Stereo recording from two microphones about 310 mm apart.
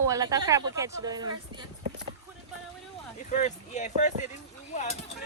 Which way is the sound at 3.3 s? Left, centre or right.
Left.